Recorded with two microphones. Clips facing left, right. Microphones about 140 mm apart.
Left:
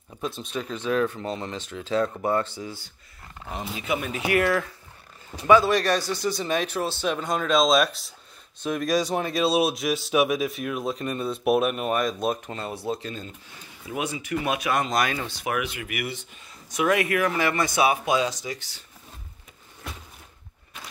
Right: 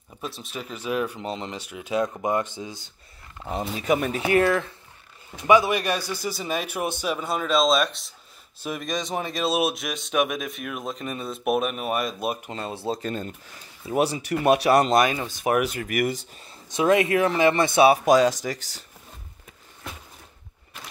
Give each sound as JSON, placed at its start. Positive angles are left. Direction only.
{"t": 0.2, "sound": "speech", "side_deg": -5}
{"t": 3.4, "sound": "speech", "side_deg": -40}
{"t": 4.3, "sound": "speech", "side_deg": -30}
{"t": 5.5, "sound": "speech", "side_deg": -15}
{"t": 7.1, "sound": "speech", "side_deg": -5}
{"t": 12.4, "sound": "speech", "side_deg": -25}
{"t": 13.0, "sound": "speech", "side_deg": -50}
{"t": 13.8, "sound": "speech", "side_deg": -35}
{"t": 15.0, "sound": "speech", "side_deg": -20}
{"t": 15.2, "sound": "speech", "side_deg": -40}
{"t": 16.6, "sound": "speech", "side_deg": -25}